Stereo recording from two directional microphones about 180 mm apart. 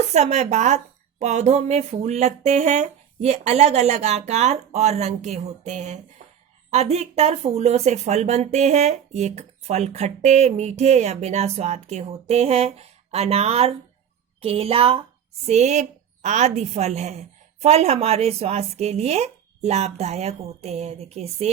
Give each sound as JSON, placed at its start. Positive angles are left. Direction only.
{"t": 0.1, "sound": "speech", "side_deg": -40}